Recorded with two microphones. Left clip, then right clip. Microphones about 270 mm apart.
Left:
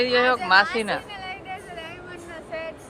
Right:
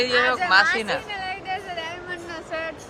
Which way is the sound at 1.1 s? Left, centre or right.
Right.